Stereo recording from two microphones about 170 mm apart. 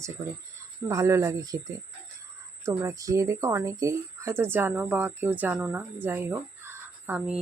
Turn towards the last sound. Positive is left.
turn(degrees=-5)  # may be behind; listen again after turning